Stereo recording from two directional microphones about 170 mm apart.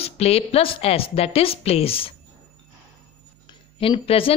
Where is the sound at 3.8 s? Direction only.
35° left (ahead or behind).